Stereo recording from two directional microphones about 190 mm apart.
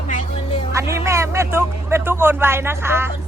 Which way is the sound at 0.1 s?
40° left (ahead or behind).